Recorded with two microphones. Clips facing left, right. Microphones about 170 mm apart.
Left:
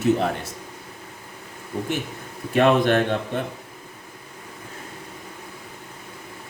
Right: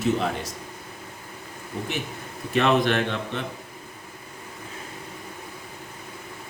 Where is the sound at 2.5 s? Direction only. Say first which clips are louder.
Left 3 dB; 50° left (ahead or behind).